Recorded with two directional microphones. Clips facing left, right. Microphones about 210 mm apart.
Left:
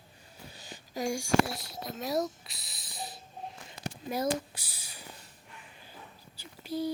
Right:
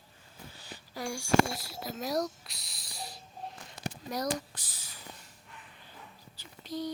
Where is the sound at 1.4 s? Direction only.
Centre (ahead or behind).